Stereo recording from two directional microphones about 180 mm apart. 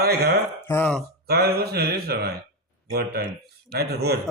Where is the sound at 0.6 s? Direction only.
10° left (ahead or behind).